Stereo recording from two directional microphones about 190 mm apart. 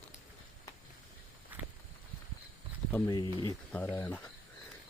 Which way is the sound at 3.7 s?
10° left (ahead or behind).